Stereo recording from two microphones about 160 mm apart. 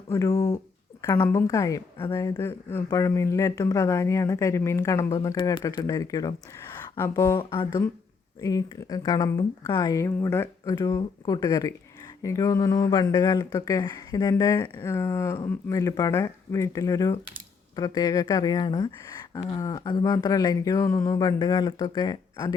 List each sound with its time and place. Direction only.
0.1 s speech: 20° left (ahead or behind)
8.4 s speech: 25° left (ahead or behind)